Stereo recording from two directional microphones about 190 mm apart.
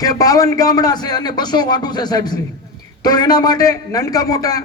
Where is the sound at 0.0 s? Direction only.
20° left (ahead or behind).